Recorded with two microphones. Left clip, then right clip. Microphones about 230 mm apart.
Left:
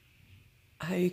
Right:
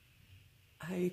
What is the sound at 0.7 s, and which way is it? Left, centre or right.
Speech, left.